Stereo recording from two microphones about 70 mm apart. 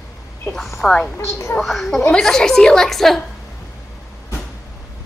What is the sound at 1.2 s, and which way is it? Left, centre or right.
Speech, left.